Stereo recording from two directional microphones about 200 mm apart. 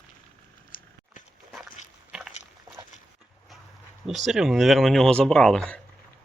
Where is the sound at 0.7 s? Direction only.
45° left (ahead or behind).